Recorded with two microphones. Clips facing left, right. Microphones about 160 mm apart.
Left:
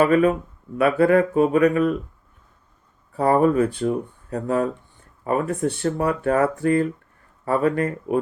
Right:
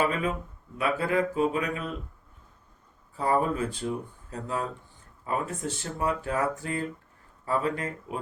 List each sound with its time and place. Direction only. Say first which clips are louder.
0.0 s speech: left 10 dB; 60° left (ahead or behind)
3.2 s speech: left 9 dB; 60° left (ahead or behind)